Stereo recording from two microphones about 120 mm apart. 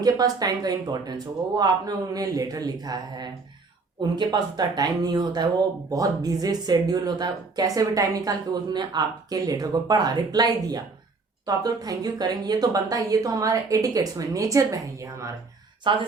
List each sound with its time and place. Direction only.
0.0 s a woman's voice: 30° right (ahead or behind)
15.9 s a woman's voice: 40° right (ahead or behind)